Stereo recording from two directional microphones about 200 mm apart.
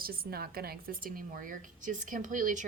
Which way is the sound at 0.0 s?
50° right (ahead or behind).